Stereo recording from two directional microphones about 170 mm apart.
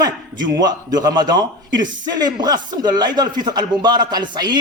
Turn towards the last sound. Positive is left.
turn(degrees=-25)  # may be behind; listen again after turning